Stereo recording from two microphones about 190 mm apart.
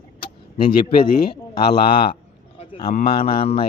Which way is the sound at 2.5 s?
30° left (ahead or behind).